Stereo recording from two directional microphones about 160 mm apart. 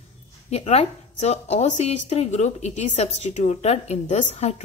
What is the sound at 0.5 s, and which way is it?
A woman's voice, 40° left (ahead or behind).